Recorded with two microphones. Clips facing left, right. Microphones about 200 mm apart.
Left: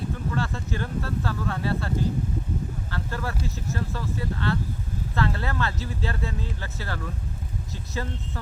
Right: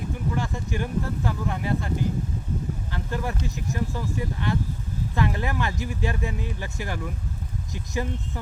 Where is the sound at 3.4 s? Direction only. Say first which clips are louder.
Right 2 dB; 15° right (ahead or behind).